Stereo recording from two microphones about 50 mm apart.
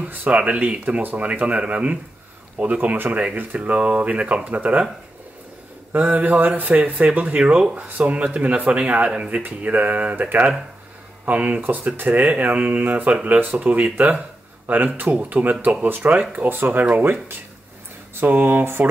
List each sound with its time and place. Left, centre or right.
0.3 s speech: right
5.9 s speech: right
16.4 s speech: right
17.0 s speech: right
18.2 s speech: right